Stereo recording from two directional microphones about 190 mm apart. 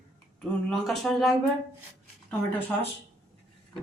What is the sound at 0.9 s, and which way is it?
Speech, centre (ahead or behind).